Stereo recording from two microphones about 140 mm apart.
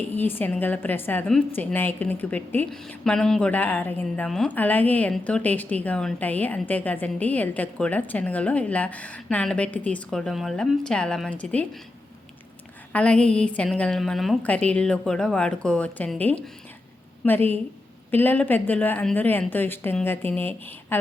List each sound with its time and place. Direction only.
0.1 s a woman's voice: 15° left (ahead or behind)
12.9 s a woman's voice: 10° left (ahead or behind)